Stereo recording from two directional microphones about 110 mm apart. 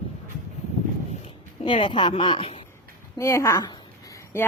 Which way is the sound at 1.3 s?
50° left (ahead or behind).